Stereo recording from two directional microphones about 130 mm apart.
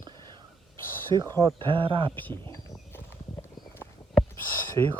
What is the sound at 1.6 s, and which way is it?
Speech, 40° right (ahead or behind).